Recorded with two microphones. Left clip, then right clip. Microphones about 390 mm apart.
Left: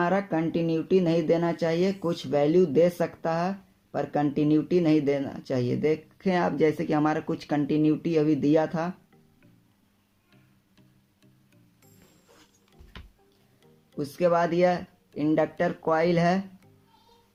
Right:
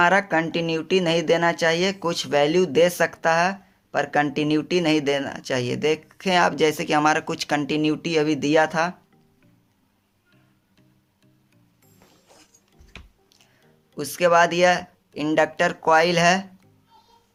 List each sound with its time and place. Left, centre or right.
0.0 s speech: right
13.9 s speech: right